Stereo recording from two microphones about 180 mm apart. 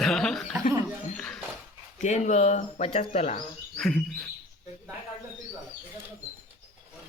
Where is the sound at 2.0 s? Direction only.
40° left (ahead or behind).